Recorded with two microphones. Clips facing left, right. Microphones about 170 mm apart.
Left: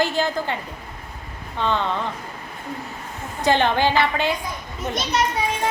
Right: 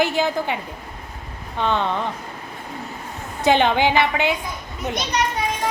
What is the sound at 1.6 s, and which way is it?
Speech, 15° right (ahead or behind).